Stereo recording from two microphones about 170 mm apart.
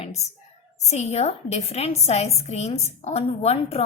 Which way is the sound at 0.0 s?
40° left (ahead or behind).